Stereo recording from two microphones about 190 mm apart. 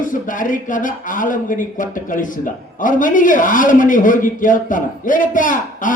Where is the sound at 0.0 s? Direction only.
45° left (ahead or behind).